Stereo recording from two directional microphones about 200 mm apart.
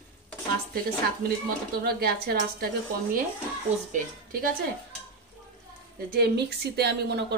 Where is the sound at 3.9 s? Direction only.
45° right (ahead or behind).